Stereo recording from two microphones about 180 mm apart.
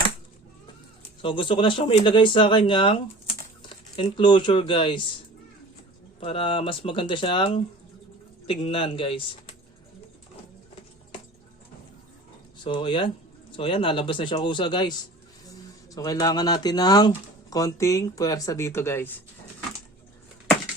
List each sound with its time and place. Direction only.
1.2 s speech: 30° left (ahead or behind)
6.1 s speech: 30° left (ahead or behind)
12.6 s speech: 30° left (ahead or behind)
16.0 s speech: 20° left (ahead or behind)